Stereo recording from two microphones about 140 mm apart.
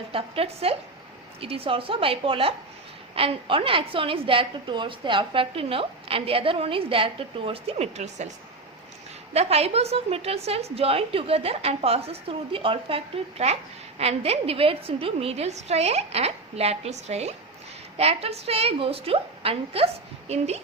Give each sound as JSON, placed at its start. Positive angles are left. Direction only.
{"t": 0.1, "sound": "a woman's voice", "side_deg": -40}
{"t": 9.3, "sound": "a woman's voice", "side_deg": -50}